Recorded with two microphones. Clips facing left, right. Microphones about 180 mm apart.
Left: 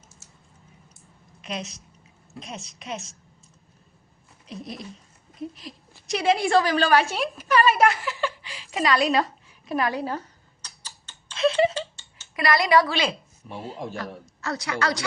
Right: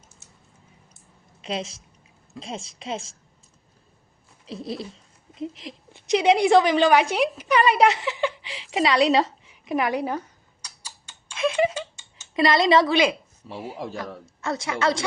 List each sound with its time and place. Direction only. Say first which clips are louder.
1.4 s a woman's voice: right 4 dB; 30° right (ahead or behind)
4.4 s a woman's voice: right 5 dB; 30° right (ahead or behind)
5.4 s a sound: right 3 dB; 20° right (ahead or behind)
12.4 s a woman's voice: right 2 dB; 25° right (ahead or behind)
14.4 s a woman's voice: right 3 dB; 25° right (ahead or behind)